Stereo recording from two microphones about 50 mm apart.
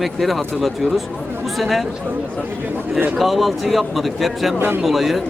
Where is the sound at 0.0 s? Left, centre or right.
Centre.